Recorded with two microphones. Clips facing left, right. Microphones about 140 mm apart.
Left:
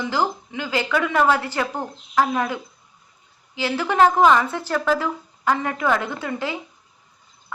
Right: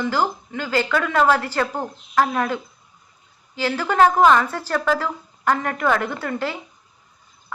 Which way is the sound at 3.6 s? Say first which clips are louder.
Right 1 dB; 15° left (ahead or behind).